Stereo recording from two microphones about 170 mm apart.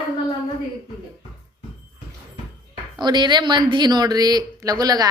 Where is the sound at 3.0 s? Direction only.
25° right (ahead or behind).